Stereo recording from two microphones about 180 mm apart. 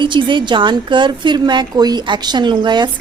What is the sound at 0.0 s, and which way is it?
A woman's voice, 25° right (ahead or behind).